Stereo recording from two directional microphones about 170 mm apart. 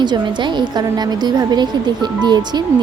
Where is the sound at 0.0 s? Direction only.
25° right (ahead or behind).